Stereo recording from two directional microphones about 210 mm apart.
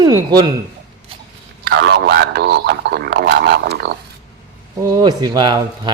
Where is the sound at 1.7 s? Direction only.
55° right (ahead or behind).